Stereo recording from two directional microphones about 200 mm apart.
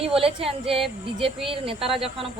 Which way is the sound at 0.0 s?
30° right (ahead or behind).